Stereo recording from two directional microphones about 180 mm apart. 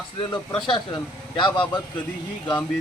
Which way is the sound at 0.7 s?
25° left (ahead or behind).